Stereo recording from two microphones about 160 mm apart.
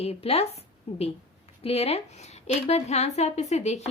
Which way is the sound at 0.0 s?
40° left (ahead or behind).